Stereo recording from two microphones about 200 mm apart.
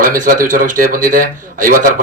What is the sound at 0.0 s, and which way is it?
Speech, 45° right (ahead or behind).